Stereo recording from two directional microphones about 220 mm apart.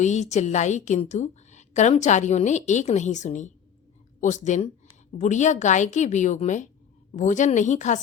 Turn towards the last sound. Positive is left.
turn(degrees=35)  # may be behind; listen again after turning